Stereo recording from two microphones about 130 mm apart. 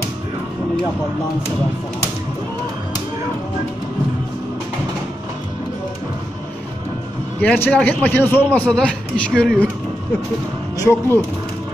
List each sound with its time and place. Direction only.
7.4 s a man's voice: 15° left (ahead or behind)
10.8 s speech: 20° left (ahead or behind)